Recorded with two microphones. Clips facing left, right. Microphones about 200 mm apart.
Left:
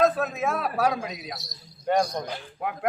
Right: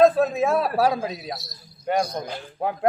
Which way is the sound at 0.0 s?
30° right (ahead or behind).